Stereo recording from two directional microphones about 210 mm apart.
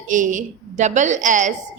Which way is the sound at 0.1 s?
40° right (ahead or behind).